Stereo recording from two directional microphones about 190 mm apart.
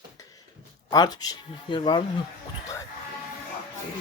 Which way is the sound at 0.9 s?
20° left (ahead or behind).